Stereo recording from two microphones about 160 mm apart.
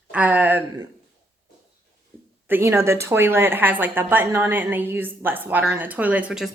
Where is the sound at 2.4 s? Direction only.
15° right (ahead or behind).